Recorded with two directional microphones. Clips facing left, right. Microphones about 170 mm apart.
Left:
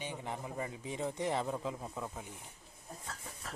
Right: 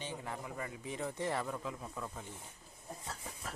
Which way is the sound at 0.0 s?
20° left (ahead or behind).